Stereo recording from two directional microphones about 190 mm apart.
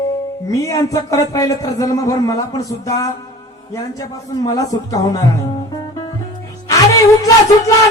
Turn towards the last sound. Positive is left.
turn(degrees=15)  # may be behind; listen again after turning